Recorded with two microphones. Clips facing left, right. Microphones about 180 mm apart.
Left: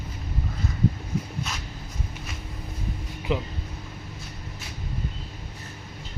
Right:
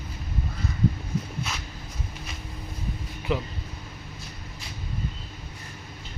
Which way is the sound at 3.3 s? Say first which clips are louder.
Even; 20° left (ahead or behind).